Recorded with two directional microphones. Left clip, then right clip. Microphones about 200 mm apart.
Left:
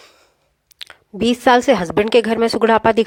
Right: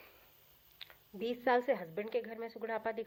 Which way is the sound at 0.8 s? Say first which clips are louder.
Left 19 dB; 50° left (ahead or behind).